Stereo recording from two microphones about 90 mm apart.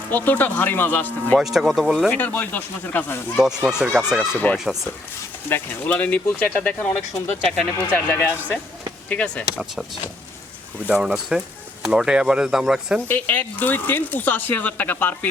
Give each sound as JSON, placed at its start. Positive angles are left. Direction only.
{"t": 0.1, "sound": "speech", "side_deg": 20}
{"t": 1.4, "sound": "speech", "side_deg": -5}
{"t": 2.0, "sound": "speech", "side_deg": 20}
{"t": 3.3, "sound": "speech", "side_deg": -5}
{"t": 5.5, "sound": "speech", "side_deg": 20}
{"t": 7.9, "sound": "speech", "side_deg": 15}
{"t": 9.6, "sound": "speech", "side_deg": -5}
{"t": 13.1, "sound": "speech", "side_deg": 20}